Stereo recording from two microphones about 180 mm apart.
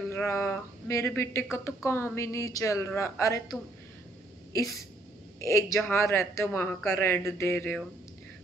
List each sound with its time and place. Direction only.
0.1 s a man's voice: 15° left (ahead or behind)
5.4 s a man's voice: 15° left (ahead or behind)